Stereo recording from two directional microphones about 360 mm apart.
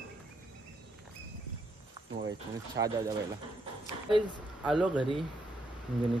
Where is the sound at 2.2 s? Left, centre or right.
Centre.